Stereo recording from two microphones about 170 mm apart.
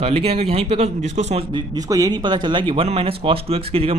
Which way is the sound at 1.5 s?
20° right (ahead or behind).